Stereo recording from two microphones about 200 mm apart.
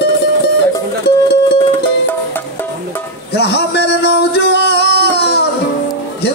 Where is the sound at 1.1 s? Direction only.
50° left (ahead or behind).